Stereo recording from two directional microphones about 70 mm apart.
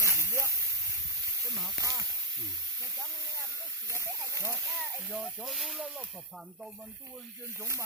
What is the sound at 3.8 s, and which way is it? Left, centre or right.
Speech, right.